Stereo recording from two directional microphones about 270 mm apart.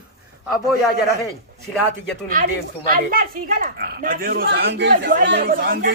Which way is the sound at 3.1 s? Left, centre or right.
Right.